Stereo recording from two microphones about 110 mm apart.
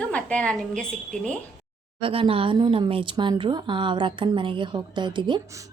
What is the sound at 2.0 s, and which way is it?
Speech, 55° right (ahead or behind).